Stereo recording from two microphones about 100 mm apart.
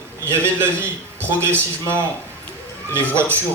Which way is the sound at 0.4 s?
25° right (ahead or behind).